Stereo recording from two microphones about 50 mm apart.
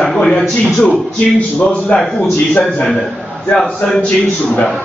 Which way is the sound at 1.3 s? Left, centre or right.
Left.